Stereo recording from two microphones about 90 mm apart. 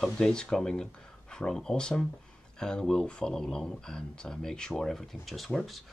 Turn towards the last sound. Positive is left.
turn(degrees=0)  # may be behind; listen again after turning